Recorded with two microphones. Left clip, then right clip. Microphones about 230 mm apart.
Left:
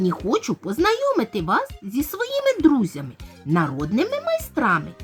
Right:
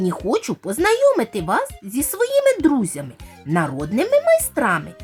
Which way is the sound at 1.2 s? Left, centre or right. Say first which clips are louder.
Right 1 dB; left.